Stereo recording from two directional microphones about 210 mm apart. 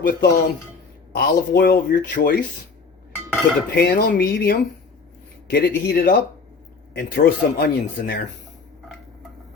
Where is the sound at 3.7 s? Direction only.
50° left (ahead or behind).